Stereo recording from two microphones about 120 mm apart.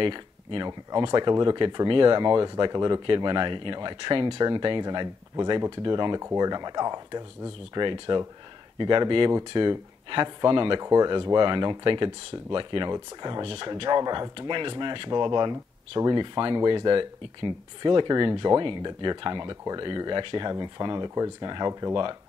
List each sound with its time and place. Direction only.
0.0 s speech: 45° right (ahead or behind)
10.8 s speech: 30° right (ahead or behind)